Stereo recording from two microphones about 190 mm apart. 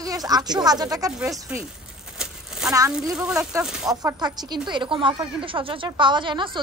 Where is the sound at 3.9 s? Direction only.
20° right (ahead or behind).